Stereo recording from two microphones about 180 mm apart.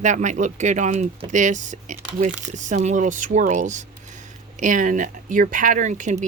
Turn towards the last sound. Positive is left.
turn(degrees=-45)  # may be behind; listen again after turning